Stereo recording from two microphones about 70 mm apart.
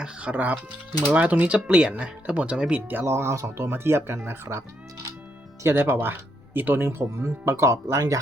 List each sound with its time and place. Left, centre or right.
0.0 s speech: centre
2.9 s speech: right
5.6 s speech: right